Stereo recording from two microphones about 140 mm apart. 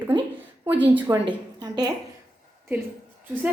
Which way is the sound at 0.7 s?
10° right (ahead or behind).